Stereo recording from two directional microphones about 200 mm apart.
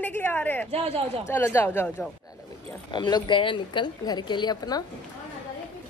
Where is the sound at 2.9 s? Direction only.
20° left (ahead or behind).